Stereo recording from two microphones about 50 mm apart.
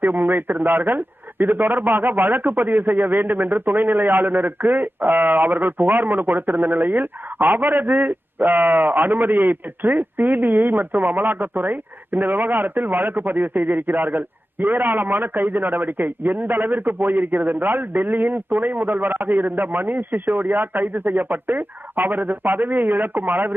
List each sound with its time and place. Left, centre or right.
0.0 s speech: right